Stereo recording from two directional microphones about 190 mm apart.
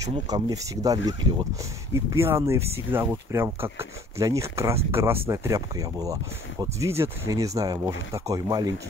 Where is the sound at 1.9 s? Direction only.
15° right (ahead or behind).